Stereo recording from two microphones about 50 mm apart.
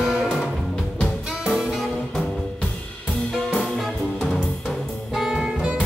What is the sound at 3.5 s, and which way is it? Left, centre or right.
Music, centre.